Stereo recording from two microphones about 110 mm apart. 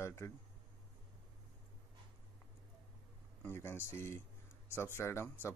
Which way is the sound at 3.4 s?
20° left (ahead or behind).